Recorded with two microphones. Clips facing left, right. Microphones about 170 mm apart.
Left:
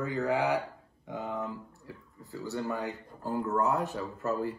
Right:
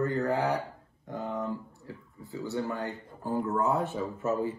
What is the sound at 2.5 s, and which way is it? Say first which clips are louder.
Speech: even; centre (ahead or behind).